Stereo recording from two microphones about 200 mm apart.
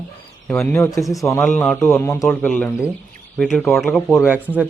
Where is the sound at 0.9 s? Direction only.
Centre (ahead or behind).